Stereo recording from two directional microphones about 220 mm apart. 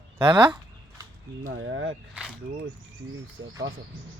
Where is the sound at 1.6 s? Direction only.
60° right (ahead or behind).